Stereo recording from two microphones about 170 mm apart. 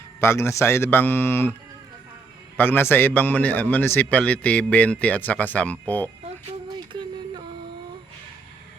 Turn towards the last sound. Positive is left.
turn(degrees=-30)  # may be behind; listen again after turning